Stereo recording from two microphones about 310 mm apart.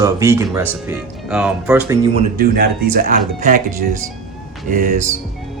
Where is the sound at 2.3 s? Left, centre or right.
Right.